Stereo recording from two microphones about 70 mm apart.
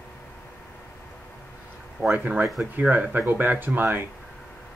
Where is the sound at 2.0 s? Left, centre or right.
Right.